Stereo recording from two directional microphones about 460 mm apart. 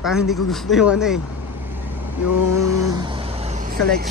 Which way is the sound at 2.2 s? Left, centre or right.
Left.